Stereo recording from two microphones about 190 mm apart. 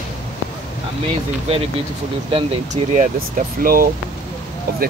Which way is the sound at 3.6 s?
50° right (ahead or behind).